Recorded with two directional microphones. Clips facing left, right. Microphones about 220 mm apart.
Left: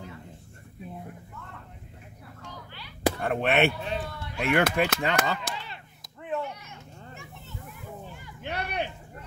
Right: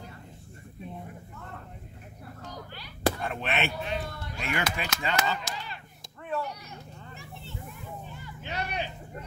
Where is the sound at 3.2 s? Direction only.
55° left (ahead or behind).